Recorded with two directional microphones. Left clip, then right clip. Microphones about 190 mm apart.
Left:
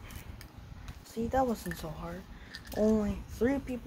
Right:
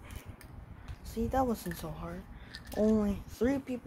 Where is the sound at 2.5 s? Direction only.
5° right (ahead or behind).